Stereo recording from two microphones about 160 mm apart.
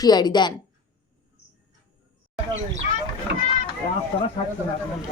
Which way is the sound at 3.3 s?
90° right.